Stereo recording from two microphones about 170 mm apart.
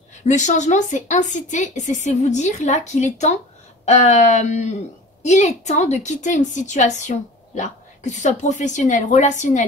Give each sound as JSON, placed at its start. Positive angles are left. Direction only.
{"t": 0.3, "sound": "a woman's voice", "side_deg": 45}